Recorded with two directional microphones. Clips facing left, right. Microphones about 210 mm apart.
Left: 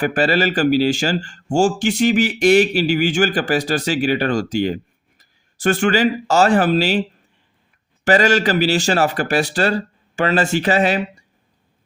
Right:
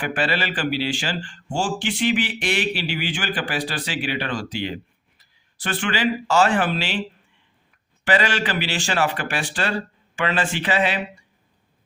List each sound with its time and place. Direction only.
0.0 s speech: 40° left (ahead or behind)
8.0 s speech: 40° left (ahead or behind)